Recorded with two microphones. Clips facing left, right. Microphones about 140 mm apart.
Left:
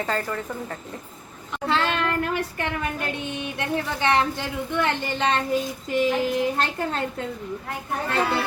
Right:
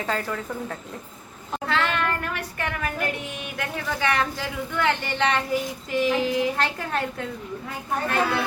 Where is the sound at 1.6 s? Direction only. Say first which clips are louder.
Left 1 dB; 30° left (ahead or behind).